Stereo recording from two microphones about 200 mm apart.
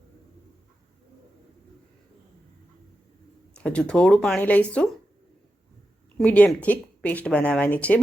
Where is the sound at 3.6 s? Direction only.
5° left (ahead or behind).